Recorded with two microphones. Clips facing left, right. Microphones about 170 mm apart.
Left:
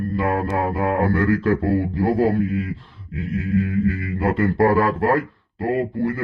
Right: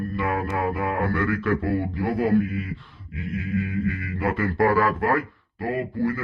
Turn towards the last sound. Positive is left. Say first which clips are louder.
# left 3 dB
turn(degrees=30)  # may be behind; listen again after turning